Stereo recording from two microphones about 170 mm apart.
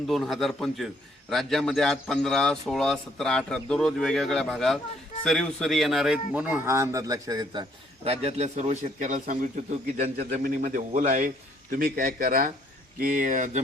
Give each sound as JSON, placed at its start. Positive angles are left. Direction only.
{"t": 0.1, "sound": "a man's voice", "side_deg": 0}
{"t": 8.0, "sound": "a man's voice", "side_deg": -35}
{"t": 11.8, "sound": "a man's voice", "side_deg": -55}